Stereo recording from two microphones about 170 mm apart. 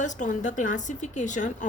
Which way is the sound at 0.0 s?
45° left (ahead or behind).